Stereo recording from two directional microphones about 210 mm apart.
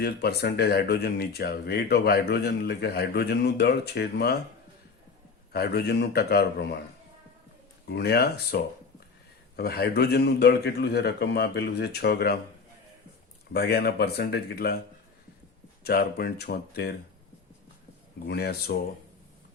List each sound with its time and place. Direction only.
0.0 s speech: 50° left (ahead or behind)
5.5 s speech: 50° left (ahead or behind)
7.9 s speech: 50° left (ahead or behind)
13.5 s speech: 50° left (ahead or behind)
15.8 s speech: 50° left (ahead or behind)
18.3 s speech: 50° left (ahead or behind)